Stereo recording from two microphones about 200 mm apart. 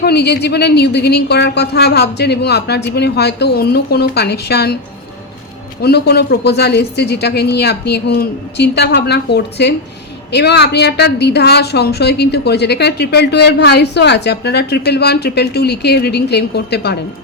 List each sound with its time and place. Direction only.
0.0 s a woman's voice: 55° left (ahead or behind)
5.8 s a woman's voice: 55° left (ahead or behind)